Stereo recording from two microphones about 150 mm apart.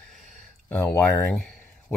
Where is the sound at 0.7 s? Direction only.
10° left (ahead or behind).